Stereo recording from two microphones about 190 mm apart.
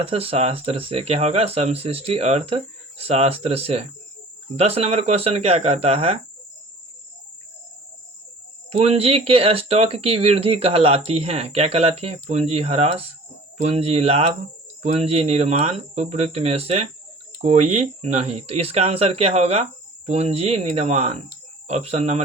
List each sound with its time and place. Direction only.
0.0 s speech: 30° right (ahead or behind)
8.7 s speech: 30° right (ahead or behind)